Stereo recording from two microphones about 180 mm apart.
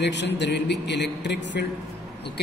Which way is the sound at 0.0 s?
75° left (ahead or behind).